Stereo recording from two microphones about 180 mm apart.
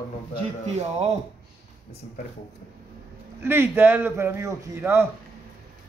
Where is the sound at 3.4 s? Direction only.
15° right (ahead or behind).